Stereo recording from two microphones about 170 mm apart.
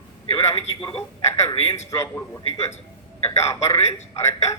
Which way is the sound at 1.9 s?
15° left (ahead or behind).